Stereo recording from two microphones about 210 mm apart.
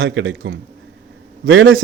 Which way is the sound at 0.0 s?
60° right (ahead or behind).